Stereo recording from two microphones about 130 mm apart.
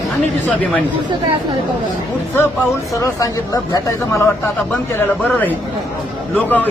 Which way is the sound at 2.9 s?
25° left (ahead or behind).